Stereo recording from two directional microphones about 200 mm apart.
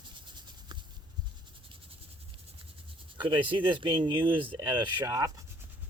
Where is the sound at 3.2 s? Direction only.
25° right (ahead or behind).